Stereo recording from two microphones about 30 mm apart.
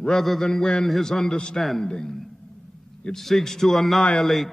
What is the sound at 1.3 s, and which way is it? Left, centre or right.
Mantra, left.